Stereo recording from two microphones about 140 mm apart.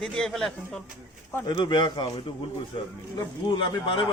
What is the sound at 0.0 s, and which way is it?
Speech, 5° left (ahead or behind).